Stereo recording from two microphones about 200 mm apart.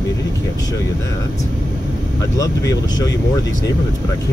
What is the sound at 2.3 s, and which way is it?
Speech, 20° left (ahead or behind).